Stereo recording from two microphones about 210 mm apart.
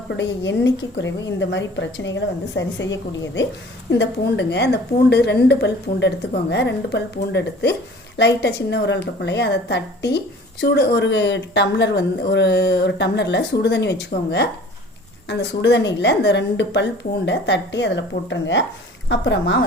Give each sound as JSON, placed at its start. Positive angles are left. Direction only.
{"t": 0.2, "sound": "a woman's voice", "side_deg": 55}